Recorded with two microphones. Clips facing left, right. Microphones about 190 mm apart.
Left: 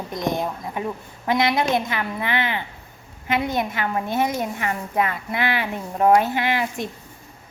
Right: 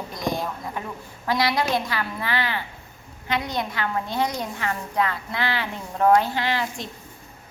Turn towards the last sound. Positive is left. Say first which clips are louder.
# left 3 dB
turn(degrees=15)  # may be behind; listen again after turning